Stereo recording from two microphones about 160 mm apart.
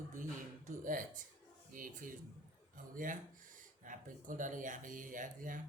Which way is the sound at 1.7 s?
60° right (ahead or behind).